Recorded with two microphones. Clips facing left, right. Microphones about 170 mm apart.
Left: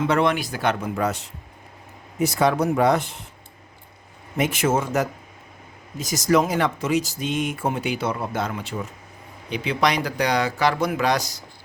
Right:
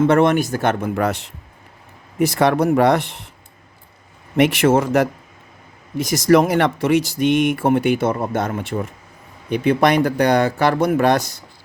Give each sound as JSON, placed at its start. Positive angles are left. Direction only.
{"t": 0.0, "sound": "speech", "side_deg": -50}
{"t": 2.1, "sound": "speech", "side_deg": -65}
{"t": 4.4, "sound": "speech", "side_deg": -70}
{"t": 6.1, "sound": "speech", "side_deg": -65}